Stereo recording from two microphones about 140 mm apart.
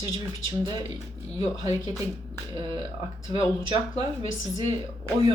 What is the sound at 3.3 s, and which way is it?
Speech, 30° right (ahead or behind).